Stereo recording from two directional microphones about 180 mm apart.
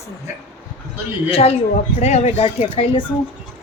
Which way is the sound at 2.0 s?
40° left (ahead or behind).